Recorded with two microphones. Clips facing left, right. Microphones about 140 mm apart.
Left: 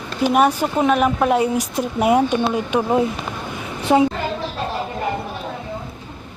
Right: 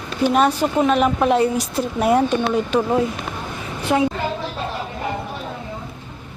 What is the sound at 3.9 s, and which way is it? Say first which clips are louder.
Speech: left 4 dB; 25° left (ahead or behind).